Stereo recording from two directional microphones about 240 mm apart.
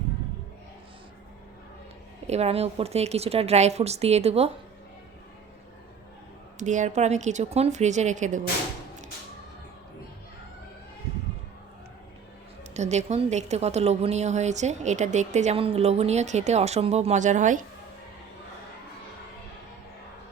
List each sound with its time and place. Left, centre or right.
2.2 s a woman's voice: right
6.6 s a woman's voice: right
12.7 s a woman's voice: right